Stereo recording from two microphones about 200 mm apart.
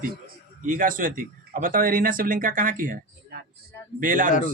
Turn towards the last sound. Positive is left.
turn(degrees=-45)  # may be behind; listen again after turning